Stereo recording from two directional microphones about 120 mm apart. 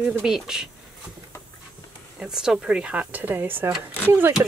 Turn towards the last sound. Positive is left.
turn(degrees=-20)  # may be behind; listen again after turning